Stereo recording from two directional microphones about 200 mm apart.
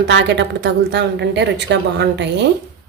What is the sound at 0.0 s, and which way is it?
A woman's voice, 60° right (ahead or behind).